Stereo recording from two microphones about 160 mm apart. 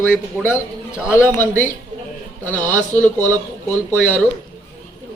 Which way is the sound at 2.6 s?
20° right (ahead or behind).